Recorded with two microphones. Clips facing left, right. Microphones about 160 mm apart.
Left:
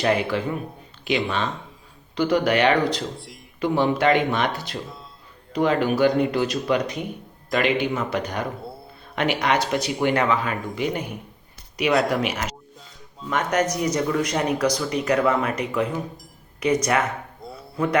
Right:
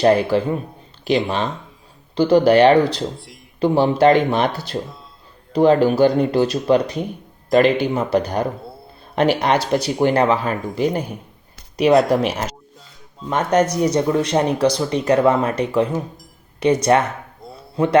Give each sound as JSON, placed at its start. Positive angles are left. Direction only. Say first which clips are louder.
{"t": 0.0, "sound": "speech", "louder": "right 7 dB", "side_deg": -35}
{"t": 2.1, "sound": "speech", "louder": "right 7 dB", "side_deg": -30}
{"t": 3.2, "sound": "speech", "louder": "even", "side_deg": 0}
{"t": 3.6, "sound": "speech", "louder": "right 6 dB", "side_deg": -30}
{"t": 12.1, "sound": "speech", "louder": "right 6 dB", "side_deg": -35}
{"t": 17.4, "sound": "a sound", "louder": "right 1 dB", "side_deg": 0}